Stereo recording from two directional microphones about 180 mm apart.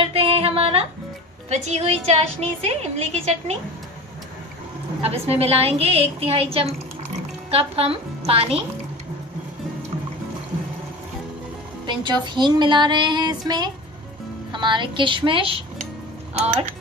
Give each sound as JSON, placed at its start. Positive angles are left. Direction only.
{"t": 0.0, "sound": "a sound", "side_deg": -30}
{"t": 1.5, "sound": "a woman's voice", "side_deg": -40}
{"t": 5.0, "sound": "a woman's voice", "side_deg": -35}
{"t": 11.8, "sound": "music", "side_deg": -25}
{"t": 16.3, "sound": "speech", "side_deg": -45}